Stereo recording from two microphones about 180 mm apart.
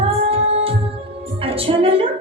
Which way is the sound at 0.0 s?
30° right (ahead or behind).